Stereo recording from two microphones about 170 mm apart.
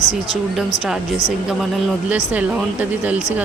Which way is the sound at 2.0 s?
10° right (ahead or behind).